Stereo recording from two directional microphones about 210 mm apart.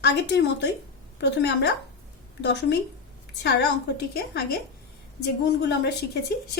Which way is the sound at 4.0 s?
50° left (ahead or behind).